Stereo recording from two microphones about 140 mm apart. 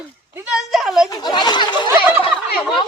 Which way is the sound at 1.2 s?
30° left (ahead or behind).